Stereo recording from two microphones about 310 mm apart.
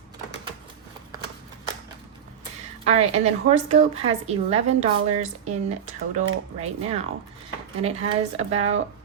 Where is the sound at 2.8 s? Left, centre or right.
Right.